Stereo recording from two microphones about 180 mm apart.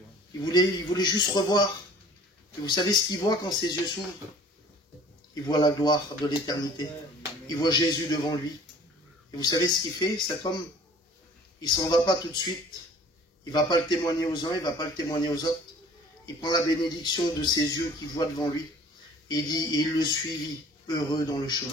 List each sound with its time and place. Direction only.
0.4 s a man's voice: 25° left (ahead or behind)
2.6 s a man's voice: 25° left (ahead or behind)
5.3 s a man's voice: 20° left (ahead or behind)
7.4 s a man's voice: 25° left (ahead or behind)
11.6 s a man's voice: 25° left (ahead or behind)